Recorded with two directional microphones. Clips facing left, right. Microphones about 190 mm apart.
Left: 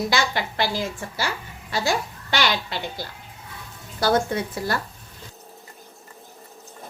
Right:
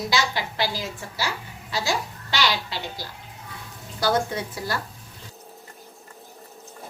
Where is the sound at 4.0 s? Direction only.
55° left (ahead or behind).